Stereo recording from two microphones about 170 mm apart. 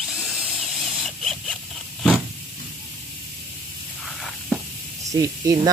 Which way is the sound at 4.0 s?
Centre (ahead or behind).